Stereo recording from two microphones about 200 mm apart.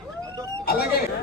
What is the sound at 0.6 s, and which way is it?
Speech, 50° left (ahead or behind).